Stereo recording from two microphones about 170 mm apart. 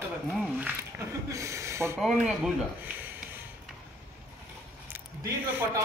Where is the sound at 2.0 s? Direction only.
Centre (ahead or behind).